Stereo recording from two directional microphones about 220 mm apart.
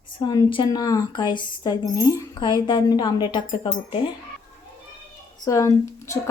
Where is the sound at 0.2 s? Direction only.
20° left (ahead or behind).